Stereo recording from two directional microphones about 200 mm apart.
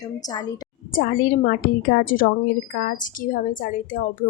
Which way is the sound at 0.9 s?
45° left (ahead or behind).